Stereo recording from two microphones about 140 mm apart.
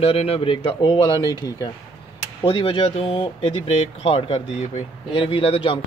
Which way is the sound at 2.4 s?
40° left (ahead or behind).